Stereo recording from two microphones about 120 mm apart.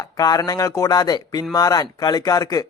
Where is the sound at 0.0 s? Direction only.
30° left (ahead or behind).